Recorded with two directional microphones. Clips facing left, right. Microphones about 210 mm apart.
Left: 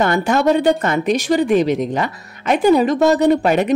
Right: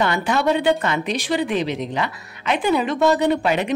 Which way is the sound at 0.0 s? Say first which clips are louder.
Left 4 dB; 45° left (ahead or behind).